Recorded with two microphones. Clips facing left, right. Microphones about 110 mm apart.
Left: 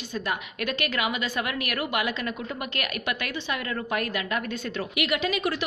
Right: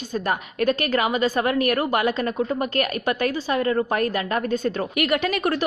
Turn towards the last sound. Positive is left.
turn(degrees=-50)  # may be behind; listen again after turning